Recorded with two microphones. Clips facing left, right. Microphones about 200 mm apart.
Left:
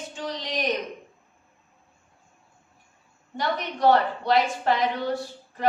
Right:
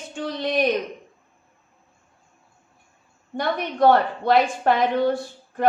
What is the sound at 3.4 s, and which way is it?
A woman's voice, 55° right (ahead or behind).